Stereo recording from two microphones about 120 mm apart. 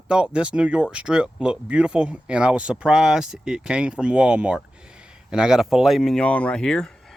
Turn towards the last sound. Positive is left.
turn(degrees=5)  # may be behind; listen again after turning